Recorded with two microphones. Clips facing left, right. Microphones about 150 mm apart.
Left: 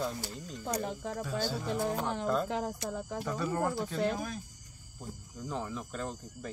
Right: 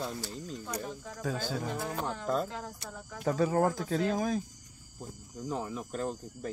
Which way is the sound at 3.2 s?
75° right (ahead or behind).